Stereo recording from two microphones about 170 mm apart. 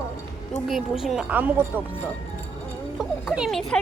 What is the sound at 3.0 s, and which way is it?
Speech, 5° right (ahead or behind).